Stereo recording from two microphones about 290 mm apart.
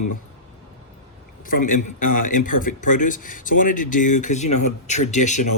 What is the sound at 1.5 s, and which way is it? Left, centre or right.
Speech, left.